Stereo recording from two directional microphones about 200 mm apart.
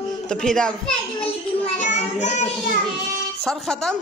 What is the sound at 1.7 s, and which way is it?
Speech, 35° left (ahead or behind).